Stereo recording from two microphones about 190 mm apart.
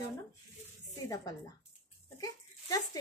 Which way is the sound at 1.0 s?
15° left (ahead or behind).